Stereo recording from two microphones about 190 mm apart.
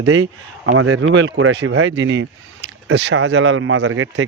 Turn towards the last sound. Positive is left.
turn(degrees=-90)